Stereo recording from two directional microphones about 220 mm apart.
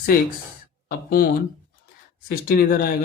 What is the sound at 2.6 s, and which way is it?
Speech, 45° left (ahead or behind).